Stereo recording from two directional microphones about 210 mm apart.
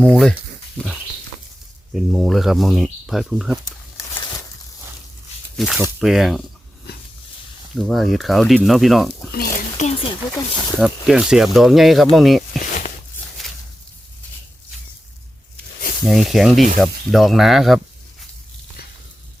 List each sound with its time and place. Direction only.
0.0 s speech: 5° left (ahead or behind)
1.9 s speech: centre (ahead or behind)
5.5 s speech: centre (ahead or behind)
7.8 s speech: centre (ahead or behind)
9.3 s speech: 45° left (ahead or behind)
9.8 s speech: 25° left (ahead or behind)
10.8 s speech: centre (ahead or behind)
16.0 s speech: centre (ahead or behind)